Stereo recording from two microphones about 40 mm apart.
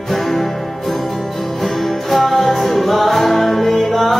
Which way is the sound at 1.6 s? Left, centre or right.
Centre.